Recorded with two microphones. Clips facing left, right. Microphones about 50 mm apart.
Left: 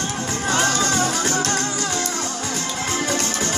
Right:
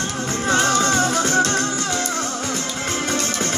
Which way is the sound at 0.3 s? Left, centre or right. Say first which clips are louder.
Right 3 dB; right.